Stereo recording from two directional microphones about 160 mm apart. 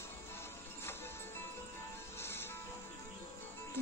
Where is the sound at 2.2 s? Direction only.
15° left (ahead or behind).